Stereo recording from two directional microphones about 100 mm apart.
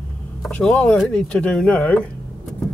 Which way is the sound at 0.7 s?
Centre (ahead or behind).